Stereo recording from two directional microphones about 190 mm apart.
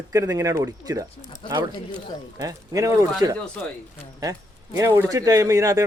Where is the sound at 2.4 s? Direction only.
20° right (ahead or behind).